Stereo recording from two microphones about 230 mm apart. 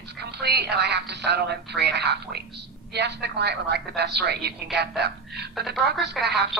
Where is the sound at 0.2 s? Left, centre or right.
Right.